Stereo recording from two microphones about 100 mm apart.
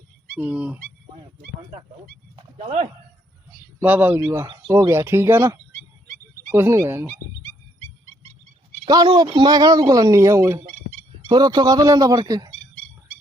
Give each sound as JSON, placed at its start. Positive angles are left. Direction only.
{"t": 0.3, "sound": "speech", "side_deg": -15}
{"t": 2.3, "sound": "speech", "side_deg": -65}
{"t": 3.8, "sound": "speech", "side_deg": -20}
{"t": 9.1, "sound": "speech", "side_deg": -55}
{"t": 11.3, "sound": "speech", "side_deg": -45}